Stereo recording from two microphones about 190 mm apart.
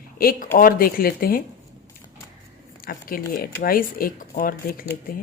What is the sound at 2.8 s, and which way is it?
A woman's voice, 50° left (ahead or behind).